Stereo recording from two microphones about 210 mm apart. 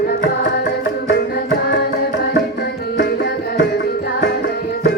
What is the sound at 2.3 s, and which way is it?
Music, 45° left (ahead or behind).